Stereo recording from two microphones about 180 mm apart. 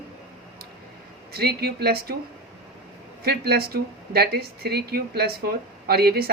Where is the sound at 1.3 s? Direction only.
60° right (ahead or behind).